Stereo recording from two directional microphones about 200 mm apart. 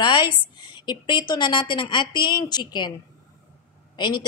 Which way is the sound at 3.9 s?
20° left (ahead or behind).